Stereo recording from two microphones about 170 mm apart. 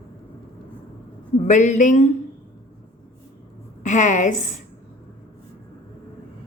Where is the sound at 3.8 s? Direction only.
45° left (ahead or behind).